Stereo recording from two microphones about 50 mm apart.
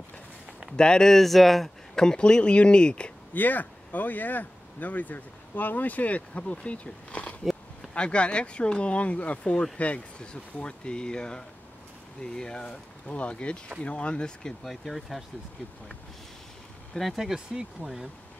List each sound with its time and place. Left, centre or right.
0.7 s speech: centre
3.3 s speech: left; by 14.5 s centre
14.6 s speech: centre
17.0 s speech: centre